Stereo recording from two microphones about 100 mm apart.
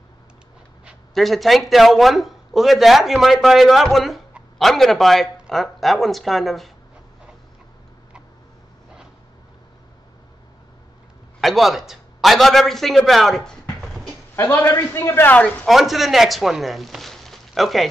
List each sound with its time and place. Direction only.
1.1 s a man's voice: centre (ahead or behind)
11.4 s a man's voice: centre (ahead or behind)
14.3 s a man's voice: 25° left (ahead or behind)
15.7 s speech: centre (ahead or behind)